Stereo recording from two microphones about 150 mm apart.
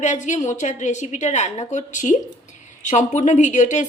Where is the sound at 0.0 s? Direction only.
55° left (ahead or behind).